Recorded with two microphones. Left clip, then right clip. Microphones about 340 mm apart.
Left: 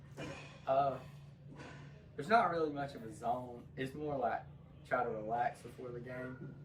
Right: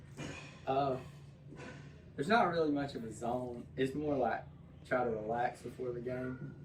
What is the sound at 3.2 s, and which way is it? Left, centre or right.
Speech, centre.